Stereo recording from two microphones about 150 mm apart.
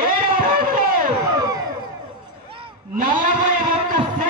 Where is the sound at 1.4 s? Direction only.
25° right (ahead or behind).